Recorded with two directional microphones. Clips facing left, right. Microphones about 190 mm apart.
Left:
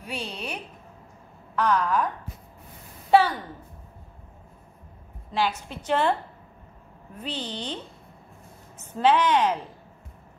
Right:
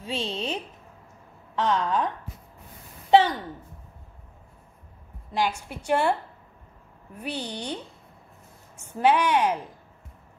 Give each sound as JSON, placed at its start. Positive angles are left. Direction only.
{"t": 0.0, "sound": "a woman's voice", "side_deg": -25}
{"t": 3.1, "sound": "a sound", "side_deg": -20}
{"t": 5.3, "sound": "a woman's voice", "side_deg": -15}
{"t": 7.2, "sound": "a woman's voice", "side_deg": -10}